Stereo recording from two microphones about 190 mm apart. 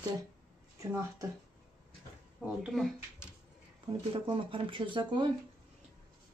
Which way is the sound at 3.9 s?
25° right (ahead or behind).